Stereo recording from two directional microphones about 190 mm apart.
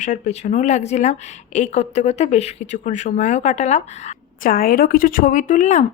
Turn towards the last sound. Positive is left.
turn(degrees=40)  # may be behind; listen again after turning